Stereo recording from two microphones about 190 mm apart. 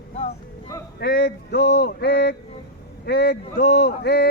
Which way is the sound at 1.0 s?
55° left (ahead or behind).